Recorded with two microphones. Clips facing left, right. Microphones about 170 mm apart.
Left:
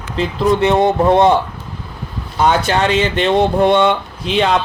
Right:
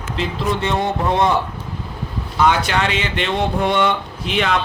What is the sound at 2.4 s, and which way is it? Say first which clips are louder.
Speech: left 4 dB; 40° left (ahead or behind).